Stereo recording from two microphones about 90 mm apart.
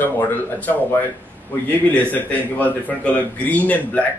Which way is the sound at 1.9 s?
20° left (ahead or behind).